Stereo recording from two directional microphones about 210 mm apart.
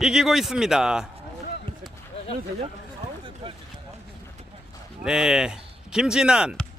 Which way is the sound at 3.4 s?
25° right (ahead or behind).